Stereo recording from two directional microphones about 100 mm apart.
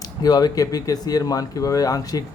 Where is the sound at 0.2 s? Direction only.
40° left (ahead or behind).